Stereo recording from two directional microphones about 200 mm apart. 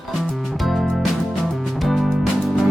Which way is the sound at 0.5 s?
Centre (ahead or behind).